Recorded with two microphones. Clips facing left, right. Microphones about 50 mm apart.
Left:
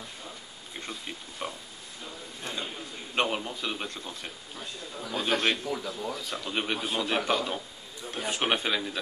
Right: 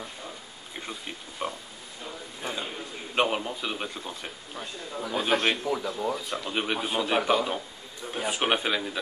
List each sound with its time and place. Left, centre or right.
0.7 s speech: centre
2.4 s a sound: centre
3.2 s a man's voice: centre